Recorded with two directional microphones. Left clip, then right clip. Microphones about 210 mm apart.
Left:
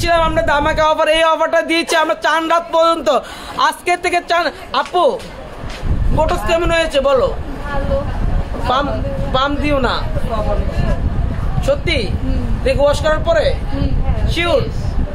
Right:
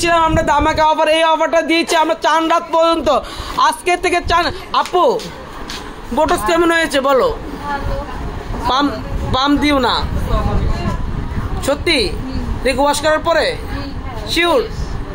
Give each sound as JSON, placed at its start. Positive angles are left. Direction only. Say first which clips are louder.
{"t": 0.0, "sound": "speech", "louder": "right 1 dB", "side_deg": -10}
{"t": 6.1, "sound": "a man's voice", "louder": "right 2 dB", "side_deg": -35}
{"t": 8.7, "sound": "a man's voice", "louder": "even", "side_deg": -40}
{"t": 11.6, "sound": "a man's voice", "louder": "right 2 dB", "side_deg": -35}